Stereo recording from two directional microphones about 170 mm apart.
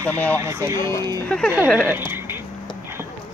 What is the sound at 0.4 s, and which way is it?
Speech, 15° right (ahead or behind).